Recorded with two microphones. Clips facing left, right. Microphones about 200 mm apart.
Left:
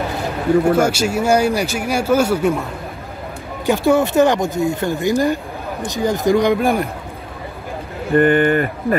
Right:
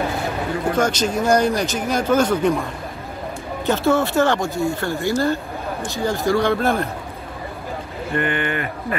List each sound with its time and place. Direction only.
0.7 s speech: 10° left (ahead or behind)
8.2 s speech: 45° left (ahead or behind)